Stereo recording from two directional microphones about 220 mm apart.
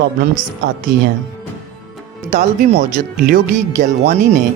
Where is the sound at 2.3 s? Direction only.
30° right (ahead or behind).